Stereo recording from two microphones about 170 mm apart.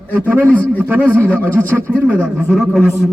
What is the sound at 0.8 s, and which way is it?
A man's voice, 15° right (ahead or behind).